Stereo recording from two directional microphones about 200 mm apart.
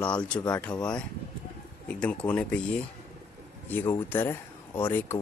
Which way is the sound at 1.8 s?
5° left (ahead or behind).